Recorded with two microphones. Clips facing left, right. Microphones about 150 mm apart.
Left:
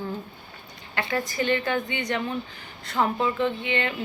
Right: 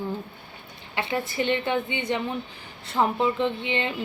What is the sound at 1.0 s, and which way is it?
A woman's voice, 25° right (ahead or behind).